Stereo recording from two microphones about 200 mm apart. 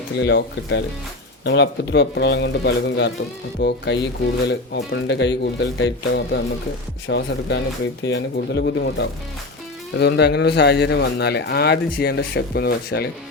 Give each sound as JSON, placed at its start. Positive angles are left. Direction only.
{"t": 0.2, "sound": "speech", "side_deg": 55}